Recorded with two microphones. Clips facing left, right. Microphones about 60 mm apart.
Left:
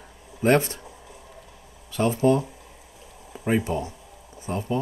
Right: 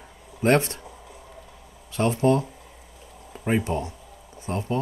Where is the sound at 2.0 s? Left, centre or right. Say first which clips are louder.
Even; centre.